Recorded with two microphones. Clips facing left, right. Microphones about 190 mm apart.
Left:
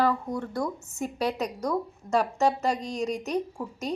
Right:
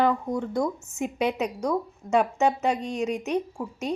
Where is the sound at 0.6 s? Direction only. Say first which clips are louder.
Right 3 dB; centre (ahead or behind).